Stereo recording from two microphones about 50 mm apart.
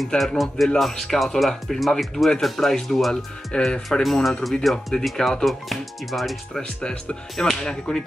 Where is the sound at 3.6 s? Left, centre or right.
Centre.